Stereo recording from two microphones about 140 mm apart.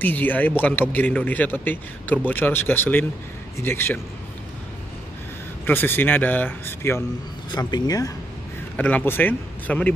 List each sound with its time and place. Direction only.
0.0 s speech: 10° left (ahead or behind)
5.7 s speech: 15° left (ahead or behind)
7.5 s speech: 30° left (ahead or behind)
8.7 s speech: 10° left (ahead or behind)